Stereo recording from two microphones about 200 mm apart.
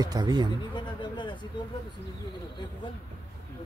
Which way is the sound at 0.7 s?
25° left (ahead or behind).